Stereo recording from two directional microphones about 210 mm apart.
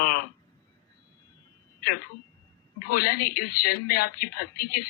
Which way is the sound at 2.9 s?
45° left (ahead or behind).